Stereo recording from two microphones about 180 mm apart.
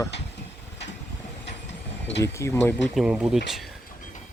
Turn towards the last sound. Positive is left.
turn(degrees=-5)  # may be behind; listen again after turning